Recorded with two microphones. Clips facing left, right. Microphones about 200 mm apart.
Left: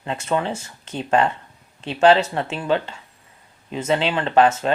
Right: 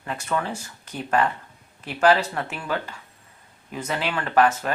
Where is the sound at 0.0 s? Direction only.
25° left (ahead or behind).